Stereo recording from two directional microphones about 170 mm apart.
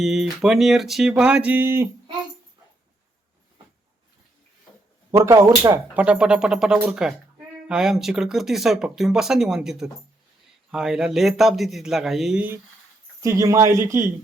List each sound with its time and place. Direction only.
0.0 s speech: centre (ahead or behind)
5.1 s speech: 15° right (ahead or behind)
13.2 s speech: 20° right (ahead or behind)